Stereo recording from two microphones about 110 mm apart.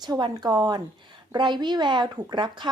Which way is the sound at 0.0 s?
40° right (ahead or behind).